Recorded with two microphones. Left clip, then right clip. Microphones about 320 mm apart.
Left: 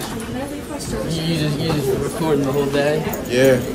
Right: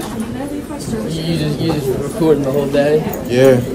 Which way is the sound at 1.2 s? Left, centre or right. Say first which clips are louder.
Right 4 dB; centre.